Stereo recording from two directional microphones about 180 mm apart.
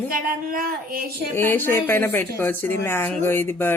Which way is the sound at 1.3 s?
10° left (ahead or behind).